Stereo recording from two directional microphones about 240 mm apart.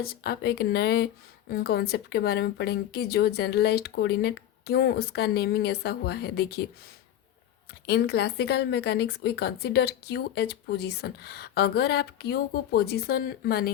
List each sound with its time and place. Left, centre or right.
0.0 s speech: left
7.9 s a woman's voice: left